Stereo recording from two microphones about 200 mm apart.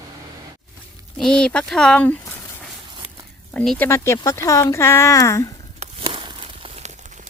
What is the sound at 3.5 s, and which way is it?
Speech, 5° left (ahead or behind).